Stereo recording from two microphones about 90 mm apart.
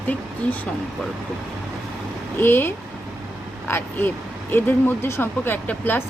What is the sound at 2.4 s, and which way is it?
Speech, 25° left (ahead or behind).